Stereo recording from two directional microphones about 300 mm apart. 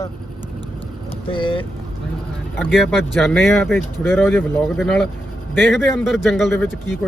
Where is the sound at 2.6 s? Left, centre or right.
Centre.